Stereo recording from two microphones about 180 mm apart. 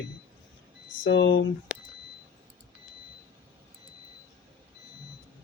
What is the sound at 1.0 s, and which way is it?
Speech, 90° left.